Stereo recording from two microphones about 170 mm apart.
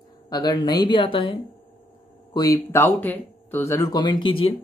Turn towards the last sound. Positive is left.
turn(degrees=30)  # may be behind; listen again after turning